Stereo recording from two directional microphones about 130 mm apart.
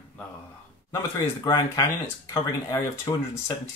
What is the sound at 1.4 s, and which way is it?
Speech, 30° left (ahead or behind).